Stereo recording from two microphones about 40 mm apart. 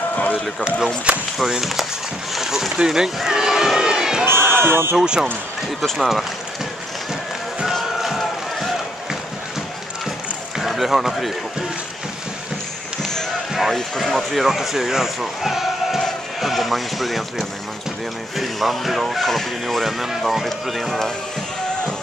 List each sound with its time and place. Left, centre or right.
0.1 s run: left
0.7 s speech: centre
2.3 s run: centre
4.6 s speech: right
4.9 s speech: centre
5.9 s speech: centre
10.6 s speech: centre
13.5 s basketball bounce: centre
13.9 s speech: centre
18.4 s speech: centre